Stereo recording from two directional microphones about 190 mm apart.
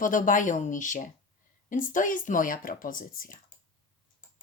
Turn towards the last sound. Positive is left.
turn(degrees=45)  # may be behind; listen again after turning